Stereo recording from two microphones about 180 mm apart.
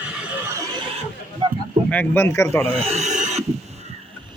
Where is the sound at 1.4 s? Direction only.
25° right (ahead or behind).